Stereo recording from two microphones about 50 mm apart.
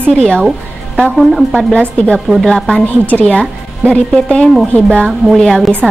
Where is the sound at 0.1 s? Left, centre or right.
Centre.